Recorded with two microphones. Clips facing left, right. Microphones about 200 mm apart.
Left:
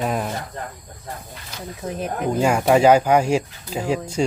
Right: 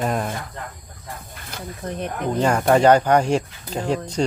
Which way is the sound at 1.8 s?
5° left (ahead or behind).